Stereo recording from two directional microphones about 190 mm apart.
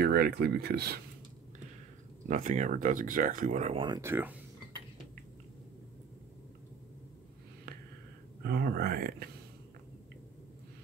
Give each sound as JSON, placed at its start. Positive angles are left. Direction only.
{"t": 0.0, "sound": "speech", "side_deg": -55}
{"t": 2.2, "sound": "speech", "side_deg": -40}
{"t": 4.0, "sound": "speech", "side_deg": -10}
{"t": 8.5, "sound": "speech", "side_deg": -55}